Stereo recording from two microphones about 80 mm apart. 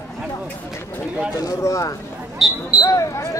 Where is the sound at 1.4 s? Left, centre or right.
Left.